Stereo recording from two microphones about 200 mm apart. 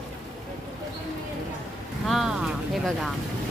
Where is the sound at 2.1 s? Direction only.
Centre (ahead or behind).